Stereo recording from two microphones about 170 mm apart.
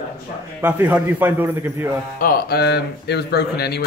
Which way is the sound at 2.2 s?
60° left (ahead or behind).